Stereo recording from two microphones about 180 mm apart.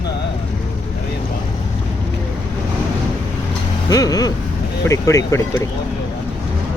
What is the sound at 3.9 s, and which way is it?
Speech, 20° left (ahead or behind).